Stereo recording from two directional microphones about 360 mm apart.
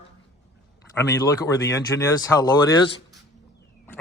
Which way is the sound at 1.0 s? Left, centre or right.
Centre.